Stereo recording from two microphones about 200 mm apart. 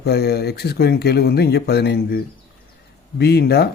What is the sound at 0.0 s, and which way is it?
Speech, 55° left (ahead or behind).